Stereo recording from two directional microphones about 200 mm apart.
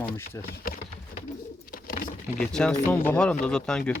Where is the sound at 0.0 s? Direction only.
10° left (ahead or behind).